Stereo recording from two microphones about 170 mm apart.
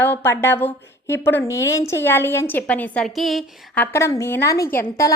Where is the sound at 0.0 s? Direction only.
10° left (ahead or behind).